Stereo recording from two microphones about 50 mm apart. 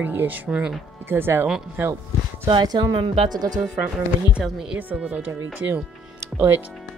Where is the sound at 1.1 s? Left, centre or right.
Right.